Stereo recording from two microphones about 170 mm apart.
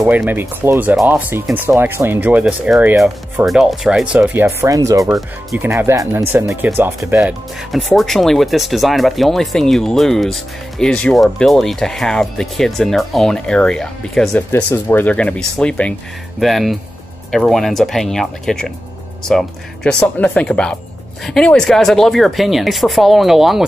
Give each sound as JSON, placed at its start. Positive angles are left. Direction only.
{"t": 0.2, "sound": "speech", "side_deg": -10}
{"t": 7.7, "sound": "speech", "side_deg": 0}